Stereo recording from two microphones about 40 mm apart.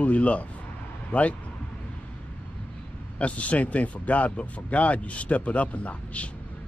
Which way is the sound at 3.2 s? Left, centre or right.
Left.